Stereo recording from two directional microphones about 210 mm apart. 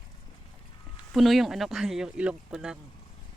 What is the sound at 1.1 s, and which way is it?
Speech, centre (ahead or behind).